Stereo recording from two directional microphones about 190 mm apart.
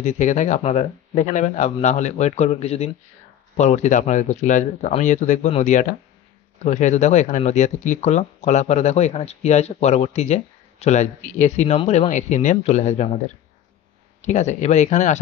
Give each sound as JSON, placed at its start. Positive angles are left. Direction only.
{"t": 0.0, "sound": "speech", "side_deg": 40}
{"t": 14.2, "sound": "speech", "side_deg": 40}